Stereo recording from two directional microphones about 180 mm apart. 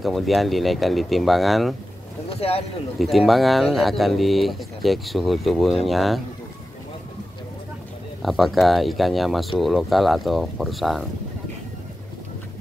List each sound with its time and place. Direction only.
0.0 s speech: centre (ahead or behind)
2.2 s speech: 35° left (ahead or behind)
3.0 s speech: centre (ahead or behind)
8.2 s speech: centre (ahead or behind)